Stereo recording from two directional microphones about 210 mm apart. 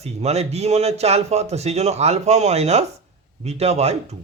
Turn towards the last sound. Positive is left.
turn(degrees=-30)  # may be behind; listen again after turning